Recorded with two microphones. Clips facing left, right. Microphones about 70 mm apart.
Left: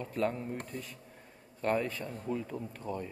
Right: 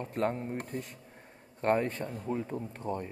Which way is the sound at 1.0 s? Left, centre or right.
Right.